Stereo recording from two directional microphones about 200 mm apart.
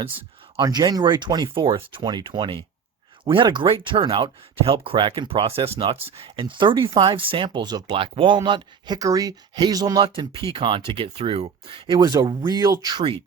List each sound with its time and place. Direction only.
0.5 s speech: 20° right (ahead or behind)